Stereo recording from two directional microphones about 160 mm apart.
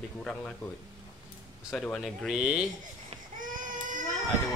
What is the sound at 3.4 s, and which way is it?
Baby cry, 55° right (ahead or behind).